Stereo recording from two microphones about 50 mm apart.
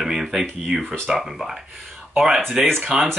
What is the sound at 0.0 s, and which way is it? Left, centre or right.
Speech, centre.